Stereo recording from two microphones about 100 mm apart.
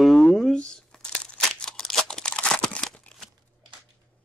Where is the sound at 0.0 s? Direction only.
Centre (ahead or behind).